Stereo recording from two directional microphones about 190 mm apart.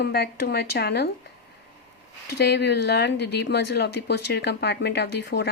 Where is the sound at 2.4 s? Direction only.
60° left (ahead or behind).